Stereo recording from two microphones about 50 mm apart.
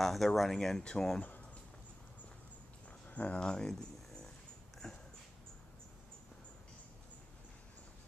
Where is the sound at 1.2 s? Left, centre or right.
Left.